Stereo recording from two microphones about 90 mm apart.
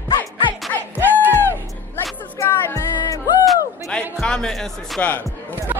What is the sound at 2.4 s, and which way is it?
Music, 35° left (ahead or behind).